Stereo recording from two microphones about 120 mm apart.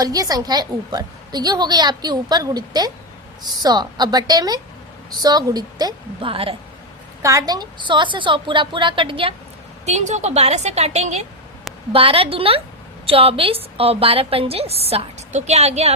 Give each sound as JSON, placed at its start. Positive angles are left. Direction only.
{"t": 0.0, "sound": "a woman's voice", "side_deg": -30}
{"t": 6.2, "sound": "a woman's voice", "side_deg": -50}
{"t": 7.2, "sound": "a woman's voice", "side_deg": -25}
{"t": 9.8, "sound": "a woman's voice", "side_deg": -75}
{"t": 11.9, "sound": "a woman's voice", "side_deg": -50}